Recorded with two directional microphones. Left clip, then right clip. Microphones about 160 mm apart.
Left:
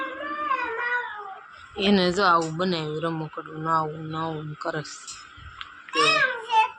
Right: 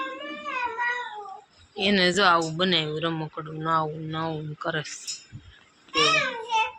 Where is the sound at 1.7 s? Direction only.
30° left (ahead or behind).